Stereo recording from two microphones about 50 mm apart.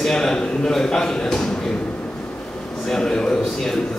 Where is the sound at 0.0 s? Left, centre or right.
Centre.